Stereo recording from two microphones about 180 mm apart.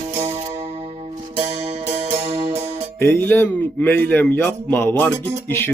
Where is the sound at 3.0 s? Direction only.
10° left (ahead or behind).